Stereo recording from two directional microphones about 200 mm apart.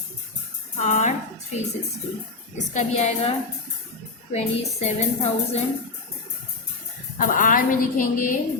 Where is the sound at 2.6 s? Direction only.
35° left (ahead or behind).